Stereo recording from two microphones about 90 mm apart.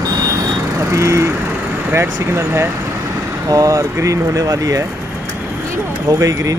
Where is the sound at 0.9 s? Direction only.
35° right (ahead or behind).